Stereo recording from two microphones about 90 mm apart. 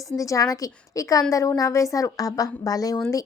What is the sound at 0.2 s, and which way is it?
Speech, 40° left (ahead or behind).